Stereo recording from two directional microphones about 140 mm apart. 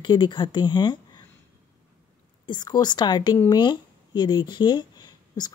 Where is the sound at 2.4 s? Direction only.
30° left (ahead or behind).